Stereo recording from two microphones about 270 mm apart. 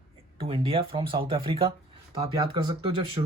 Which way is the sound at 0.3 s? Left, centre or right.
Centre.